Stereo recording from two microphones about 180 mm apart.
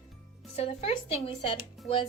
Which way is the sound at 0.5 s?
35° left (ahead or behind).